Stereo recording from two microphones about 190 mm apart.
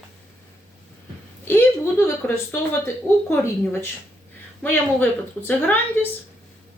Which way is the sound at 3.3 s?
15° left (ahead or behind).